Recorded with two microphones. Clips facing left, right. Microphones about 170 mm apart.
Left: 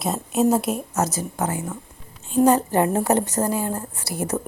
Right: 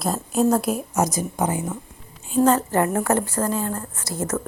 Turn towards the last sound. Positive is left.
turn(degrees=15)  # may be behind; listen again after turning